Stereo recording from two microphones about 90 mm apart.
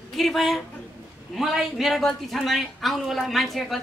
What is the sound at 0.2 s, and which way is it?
A woman's voice, centre (ahead or behind).